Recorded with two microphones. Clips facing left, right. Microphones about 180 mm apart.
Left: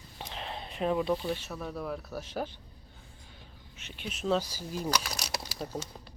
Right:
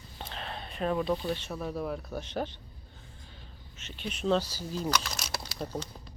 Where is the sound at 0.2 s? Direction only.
15° left (ahead or behind).